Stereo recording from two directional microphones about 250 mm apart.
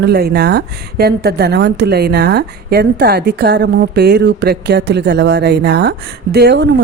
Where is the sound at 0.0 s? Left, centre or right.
Right.